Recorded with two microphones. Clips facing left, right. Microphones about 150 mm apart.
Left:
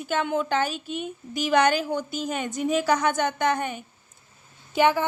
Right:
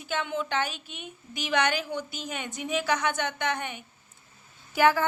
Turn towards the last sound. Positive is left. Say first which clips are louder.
# left 1 dB
turn(degrees=20)  # may be behind; listen again after turning